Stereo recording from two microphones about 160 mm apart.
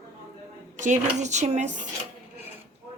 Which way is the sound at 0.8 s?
50° right (ahead or behind).